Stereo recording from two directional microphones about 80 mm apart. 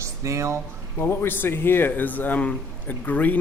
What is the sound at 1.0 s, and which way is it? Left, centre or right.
Speech, left.